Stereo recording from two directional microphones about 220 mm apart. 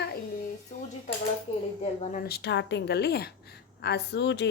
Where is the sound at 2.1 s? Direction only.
45° left (ahead or behind).